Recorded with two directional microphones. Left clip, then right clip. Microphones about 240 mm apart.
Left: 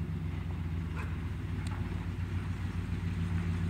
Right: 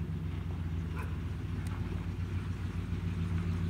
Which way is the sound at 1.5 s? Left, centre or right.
Left.